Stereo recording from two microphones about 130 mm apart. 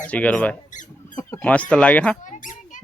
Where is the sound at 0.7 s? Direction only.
75° left (ahead or behind).